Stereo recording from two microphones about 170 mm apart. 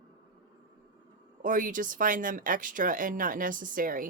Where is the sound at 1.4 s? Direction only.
50° right (ahead or behind).